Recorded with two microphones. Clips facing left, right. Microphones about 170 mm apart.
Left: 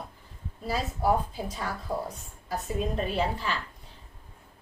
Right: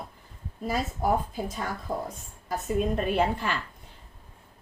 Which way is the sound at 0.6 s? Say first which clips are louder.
Even; 45° right (ahead or behind).